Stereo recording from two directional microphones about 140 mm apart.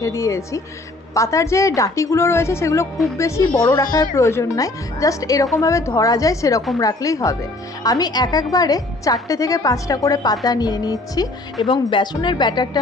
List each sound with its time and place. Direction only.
0.0 s a woman's voice: 20° left (ahead or behind)